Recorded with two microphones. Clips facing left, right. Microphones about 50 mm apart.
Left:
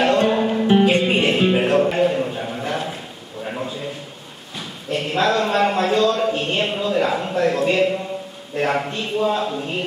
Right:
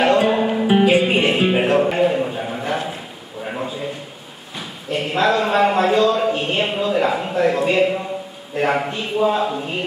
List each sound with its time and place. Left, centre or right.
0.0 s music: centre
3.4 s a sound: centre
8.5 s a man's voice: centre